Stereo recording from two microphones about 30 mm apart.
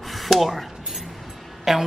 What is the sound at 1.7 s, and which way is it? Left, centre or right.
Speech, centre.